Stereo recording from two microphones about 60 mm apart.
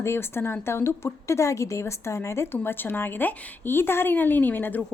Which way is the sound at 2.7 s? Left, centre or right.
Left.